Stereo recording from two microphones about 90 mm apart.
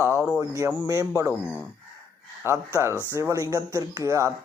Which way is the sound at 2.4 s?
30° right (ahead or behind).